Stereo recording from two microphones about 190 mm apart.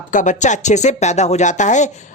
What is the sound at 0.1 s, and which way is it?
Speech, 40° left (ahead or behind).